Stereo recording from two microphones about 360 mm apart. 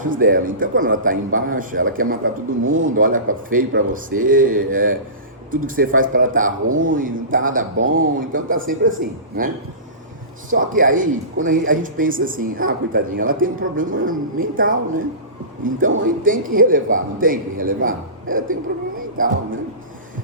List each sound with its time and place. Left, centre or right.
0.0 s speech: right
10.6 s speech: right